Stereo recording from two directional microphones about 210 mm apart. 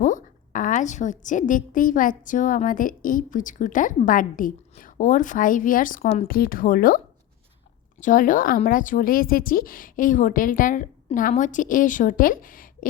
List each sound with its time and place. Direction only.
0.0 s a woman's voice: 40° left (ahead or behind)
8.0 s a woman's voice: 40° left (ahead or behind)